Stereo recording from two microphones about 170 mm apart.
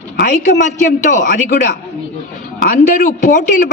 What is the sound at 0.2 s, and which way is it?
A man's voice, 50° left (ahead or behind).